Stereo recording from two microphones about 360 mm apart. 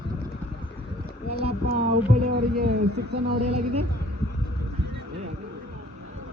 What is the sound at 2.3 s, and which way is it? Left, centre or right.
Heart sounds, right.